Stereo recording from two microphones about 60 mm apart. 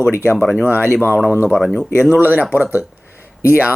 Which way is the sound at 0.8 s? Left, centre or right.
Left.